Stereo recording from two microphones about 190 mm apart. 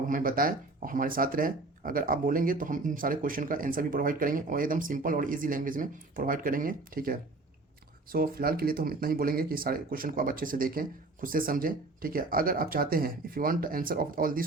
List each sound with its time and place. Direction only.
0.1 s speech: 50° right (ahead or behind)